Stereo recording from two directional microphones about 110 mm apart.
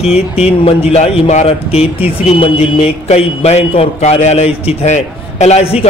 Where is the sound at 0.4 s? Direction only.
60° left (ahead or behind).